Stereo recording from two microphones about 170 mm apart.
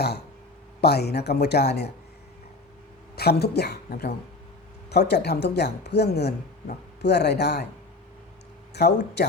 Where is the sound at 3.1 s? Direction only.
70° left (ahead or behind).